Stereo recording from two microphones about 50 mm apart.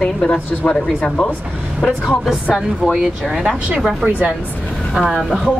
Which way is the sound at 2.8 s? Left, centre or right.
Centre.